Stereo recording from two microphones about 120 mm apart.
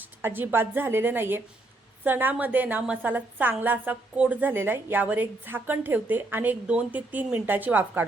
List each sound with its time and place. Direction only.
0.0 s a woman's voice: 15° right (ahead or behind)